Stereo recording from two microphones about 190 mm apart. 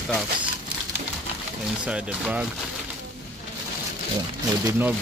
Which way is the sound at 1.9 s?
5° right (ahead or behind).